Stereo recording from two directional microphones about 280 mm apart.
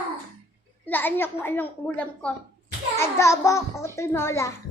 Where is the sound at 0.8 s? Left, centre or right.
Centre.